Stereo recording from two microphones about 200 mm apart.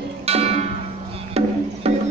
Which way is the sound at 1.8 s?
30° right (ahead or behind).